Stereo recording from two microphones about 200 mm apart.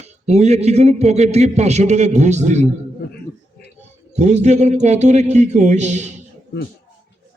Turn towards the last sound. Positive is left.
turn(degrees=-35)  # may be behind; listen again after turning